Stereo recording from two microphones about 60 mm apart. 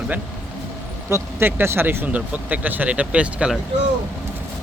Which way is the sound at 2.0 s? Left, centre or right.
Right.